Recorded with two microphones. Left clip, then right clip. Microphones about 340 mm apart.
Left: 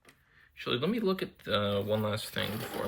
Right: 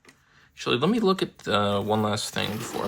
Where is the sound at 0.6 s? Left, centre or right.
Centre.